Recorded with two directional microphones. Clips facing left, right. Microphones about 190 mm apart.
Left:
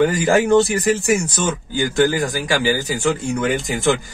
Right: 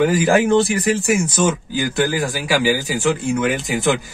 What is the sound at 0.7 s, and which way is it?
Speech, 50° left (ahead or behind).